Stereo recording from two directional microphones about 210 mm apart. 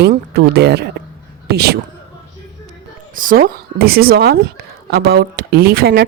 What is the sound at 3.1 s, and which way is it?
Speech, 40° right (ahead or behind).